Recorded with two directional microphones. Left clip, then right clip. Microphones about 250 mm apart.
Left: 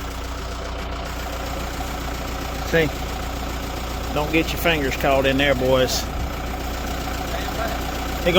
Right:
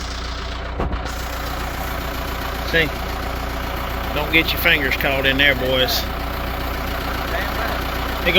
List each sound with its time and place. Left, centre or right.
2.7 s speech: centre
4.3 s speech: centre